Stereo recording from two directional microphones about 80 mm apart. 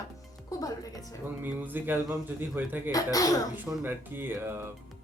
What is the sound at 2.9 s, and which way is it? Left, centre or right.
Speech, left.